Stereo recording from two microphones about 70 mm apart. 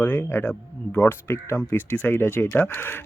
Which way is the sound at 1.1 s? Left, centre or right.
Left.